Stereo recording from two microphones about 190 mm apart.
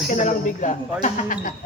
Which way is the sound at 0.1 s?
40° left (ahead or behind).